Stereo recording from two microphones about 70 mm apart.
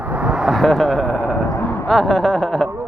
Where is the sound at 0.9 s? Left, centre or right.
Left.